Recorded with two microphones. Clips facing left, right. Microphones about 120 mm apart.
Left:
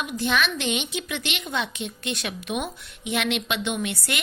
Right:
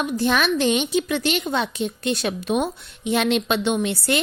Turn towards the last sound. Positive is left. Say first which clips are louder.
# right 7 dB
turn(degrees=-30)  # may be behind; listen again after turning